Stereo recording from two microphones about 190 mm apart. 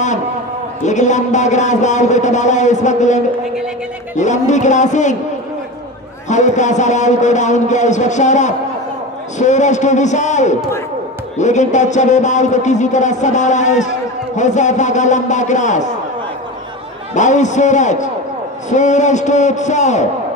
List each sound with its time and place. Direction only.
0.8 s speech: 40° left (ahead or behind)
6.2 s speech: 40° left (ahead or behind)
17.1 s speech: 40° left (ahead or behind)